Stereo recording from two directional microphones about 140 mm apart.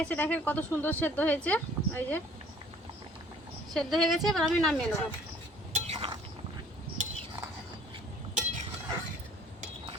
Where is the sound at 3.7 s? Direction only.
Centre (ahead or behind).